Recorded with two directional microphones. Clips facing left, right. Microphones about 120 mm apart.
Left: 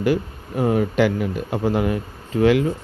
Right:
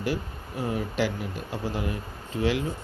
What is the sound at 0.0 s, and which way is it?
Speech, 65° left (ahead or behind).